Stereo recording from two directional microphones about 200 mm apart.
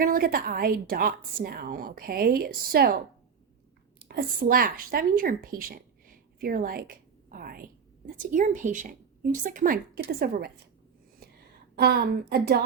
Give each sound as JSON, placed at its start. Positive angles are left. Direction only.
{"t": 0.0, "sound": "a woman's voice", "side_deg": -45}
{"t": 4.1, "sound": "speech", "side_deg": -50}
{"t": 11.8, "sound": "a woman's voice", "side_deg": -50}